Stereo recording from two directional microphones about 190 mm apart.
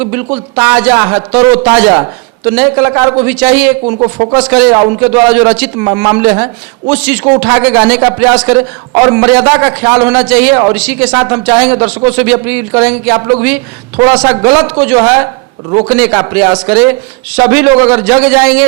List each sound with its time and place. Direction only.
0.0 s a man's voice: 10° right (ahead or behind)
4.0 s speech: 20° right (ahead or behind)
4.4 s a man's voice: 5° right (ahead or behind)